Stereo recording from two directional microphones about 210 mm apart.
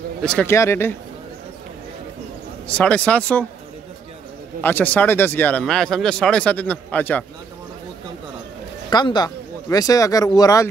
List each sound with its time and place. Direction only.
0.2 s speech: 5° left (ahead or behind)
2.7 s speech: 5° left (ahead or behind)
4.6 s speech: 10° left (ahead or behind)
8.9 s speech: 20° left (ahead or behind)